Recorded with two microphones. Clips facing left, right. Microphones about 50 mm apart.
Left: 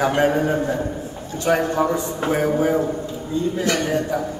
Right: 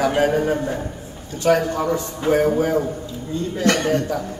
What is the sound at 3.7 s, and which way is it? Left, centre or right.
Speech, right.